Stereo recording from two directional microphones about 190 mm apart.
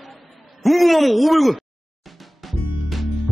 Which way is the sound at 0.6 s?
Centre (ahead or behind).